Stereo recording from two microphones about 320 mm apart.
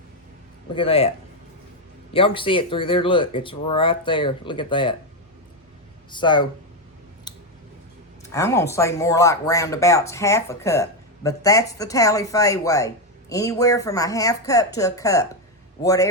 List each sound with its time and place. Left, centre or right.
0.7 s speech: centre
2.1 s speech: centre
6.1 s speech: centre
7.3 s a sound: centre
8.3 s speech: centre